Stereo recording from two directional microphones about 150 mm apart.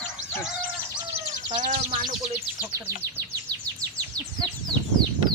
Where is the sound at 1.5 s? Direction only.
40° right (ahead or behind).